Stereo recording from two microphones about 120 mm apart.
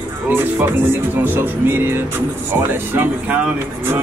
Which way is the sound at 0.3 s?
15° right (ahead or behind).